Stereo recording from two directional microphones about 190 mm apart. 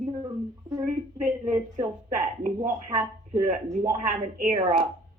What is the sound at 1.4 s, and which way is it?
Speech, 40° right (ahead or behind).